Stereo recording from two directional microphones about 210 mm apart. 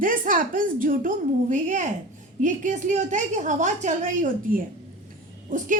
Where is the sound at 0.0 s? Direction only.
40° right (ahead or behind).